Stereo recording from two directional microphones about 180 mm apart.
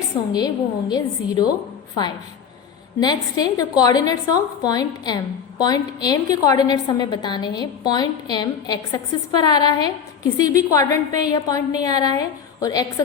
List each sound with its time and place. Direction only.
0.3 s a woman's voice: 20° left (ahead or behind)
3.0 s a woman's voice: 20° left (ahead or behind)